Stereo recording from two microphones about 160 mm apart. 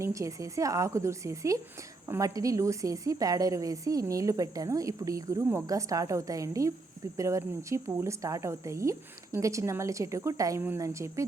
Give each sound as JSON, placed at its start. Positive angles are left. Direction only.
{"t": 0.0, "sound": "a woman's voice", "side_deg": -20}